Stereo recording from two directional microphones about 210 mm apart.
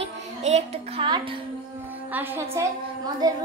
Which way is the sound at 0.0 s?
30° right (ahead or behind).